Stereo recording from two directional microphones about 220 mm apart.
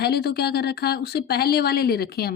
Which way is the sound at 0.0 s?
45° left (ahead or behind).